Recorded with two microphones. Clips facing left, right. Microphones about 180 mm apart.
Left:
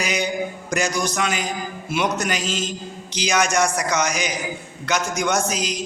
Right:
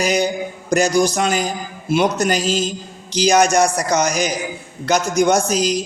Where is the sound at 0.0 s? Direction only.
40° right (ahead or behind).